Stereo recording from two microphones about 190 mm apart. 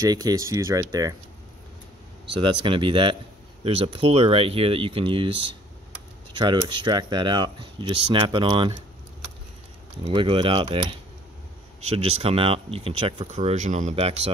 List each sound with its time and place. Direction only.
0.0 s speech: 20° right (ahead or behind)
2.3 s speech: 25° right (ahead or behind)
10.0 s speech: 25° right (ahead or behind)